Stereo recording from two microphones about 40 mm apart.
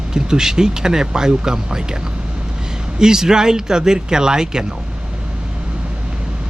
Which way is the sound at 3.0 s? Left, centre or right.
Centre.